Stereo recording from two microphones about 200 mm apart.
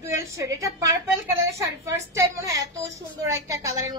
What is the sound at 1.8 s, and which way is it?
Speech, 15° right (ahead or behind).